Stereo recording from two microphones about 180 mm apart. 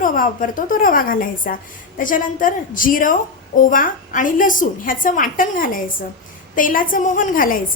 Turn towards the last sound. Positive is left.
turn(degrees=50)  # may be behind; listen again after turning